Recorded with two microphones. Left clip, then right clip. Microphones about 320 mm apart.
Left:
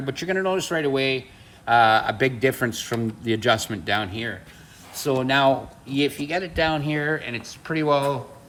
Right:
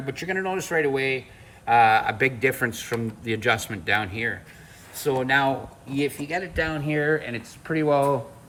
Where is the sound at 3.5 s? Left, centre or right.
Centre.